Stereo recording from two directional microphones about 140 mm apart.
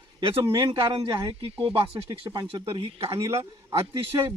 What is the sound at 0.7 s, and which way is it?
Speech, 35° right (ahead or behind).